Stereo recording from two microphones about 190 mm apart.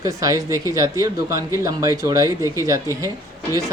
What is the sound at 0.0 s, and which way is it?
Speech, 20° right (ahead or behind).